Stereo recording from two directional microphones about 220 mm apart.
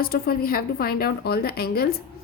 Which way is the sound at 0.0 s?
40° left (ahead or behind).